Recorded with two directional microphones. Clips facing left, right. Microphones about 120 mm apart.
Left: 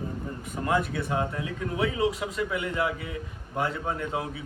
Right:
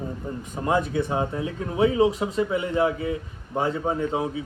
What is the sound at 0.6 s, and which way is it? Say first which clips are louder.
Speech: right 4 dB; 25° right (ahead or behind).